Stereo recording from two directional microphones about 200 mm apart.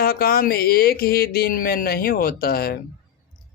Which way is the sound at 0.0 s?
50° left (ahead or behind).